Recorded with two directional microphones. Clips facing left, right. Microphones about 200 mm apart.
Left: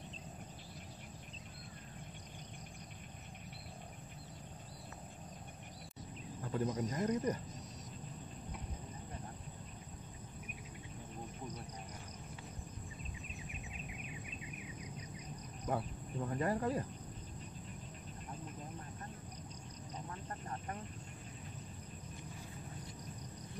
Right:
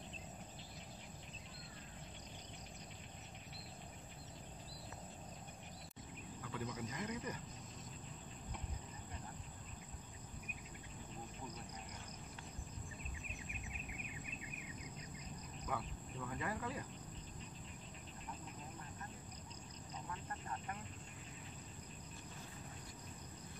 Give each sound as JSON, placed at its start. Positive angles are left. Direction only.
{"t": 6.4, "sound": "speech", "side_deg": 40}
{"t": 15.6, "sound": "cricket", "side_deg": 40}
{"t": 20.1, "sound": "vehicle", "side_deg": 35}